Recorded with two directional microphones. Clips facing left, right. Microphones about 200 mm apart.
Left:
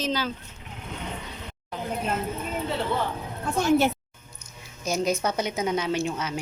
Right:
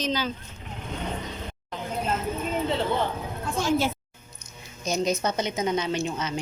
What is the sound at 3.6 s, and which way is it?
Speech, 65° left (ahead or behind).